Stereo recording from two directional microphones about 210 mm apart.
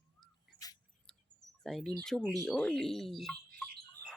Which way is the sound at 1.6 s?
Centre (ahead or behind).